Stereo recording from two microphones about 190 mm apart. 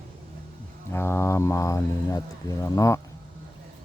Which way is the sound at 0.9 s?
15° left (ahead or behind).